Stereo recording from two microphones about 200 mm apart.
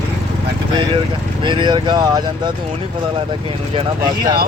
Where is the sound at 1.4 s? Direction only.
25° right (ahead or behind).